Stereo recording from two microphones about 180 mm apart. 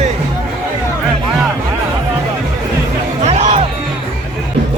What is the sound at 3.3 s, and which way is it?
Music, 35° right (ahead or behind).